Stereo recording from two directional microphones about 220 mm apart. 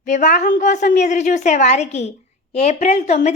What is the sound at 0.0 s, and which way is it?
A woman's voice, 35° left (ahead or behind).